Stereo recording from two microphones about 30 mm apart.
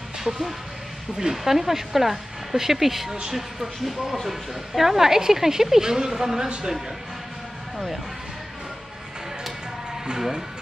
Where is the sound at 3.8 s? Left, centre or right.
Centre.